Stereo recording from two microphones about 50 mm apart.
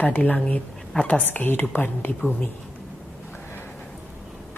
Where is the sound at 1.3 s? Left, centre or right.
Left.